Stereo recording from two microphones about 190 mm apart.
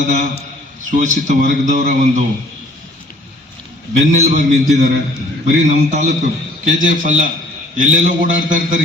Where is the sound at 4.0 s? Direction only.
40° right (ahead or behind).